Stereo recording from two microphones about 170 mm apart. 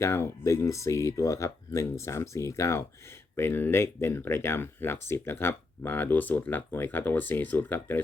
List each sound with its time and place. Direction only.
0.0 s speech: 15° left (ahead or behind)